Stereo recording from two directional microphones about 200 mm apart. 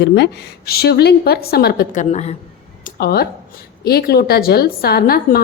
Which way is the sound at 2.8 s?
50° left (ahead or behind).